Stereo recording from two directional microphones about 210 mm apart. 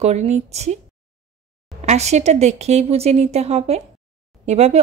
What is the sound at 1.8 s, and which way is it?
A woman's voice, 30° right (ahead or behind).